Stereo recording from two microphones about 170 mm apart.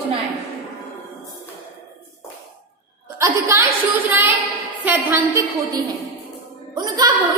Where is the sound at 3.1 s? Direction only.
15° right (ahead or behind).